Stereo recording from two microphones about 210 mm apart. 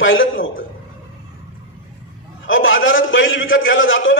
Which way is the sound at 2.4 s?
65° left (ahead or behind).